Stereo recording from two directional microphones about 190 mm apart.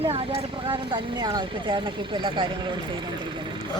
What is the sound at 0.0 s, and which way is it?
Speech, 30° right (ahead or behind).